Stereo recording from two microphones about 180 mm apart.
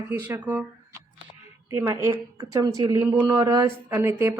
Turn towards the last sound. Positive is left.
turn(degrees=-15)  # may be behind; listen again after turning